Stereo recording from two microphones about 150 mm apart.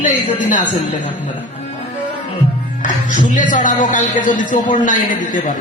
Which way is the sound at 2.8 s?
60° left (ahead or behind).